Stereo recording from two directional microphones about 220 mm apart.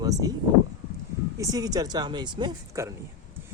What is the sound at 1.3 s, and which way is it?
Speech, 15° right (ahead or behind).